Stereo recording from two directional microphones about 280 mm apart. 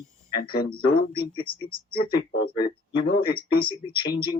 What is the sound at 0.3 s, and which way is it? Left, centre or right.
Speech, left.